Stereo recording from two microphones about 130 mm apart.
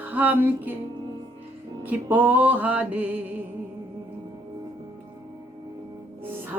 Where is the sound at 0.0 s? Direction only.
10° right (ahead or behind).